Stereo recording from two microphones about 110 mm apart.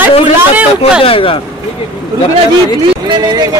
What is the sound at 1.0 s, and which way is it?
Speech, 55° left (ahead or behind).